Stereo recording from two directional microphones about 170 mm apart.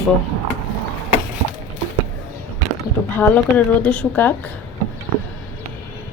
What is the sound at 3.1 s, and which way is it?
Speech, 10° left (ahead or behind).